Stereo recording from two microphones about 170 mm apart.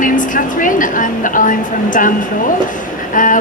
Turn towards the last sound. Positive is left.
turn(degrees=50)  # may be behind; listen again after turning